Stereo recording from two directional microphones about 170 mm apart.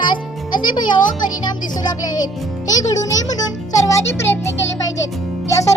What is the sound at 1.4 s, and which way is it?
A child's voice, 25° left (ahead or behind).